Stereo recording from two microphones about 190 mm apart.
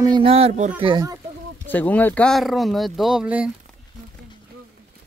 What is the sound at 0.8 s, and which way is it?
Speech, 25° right (ahead or behind).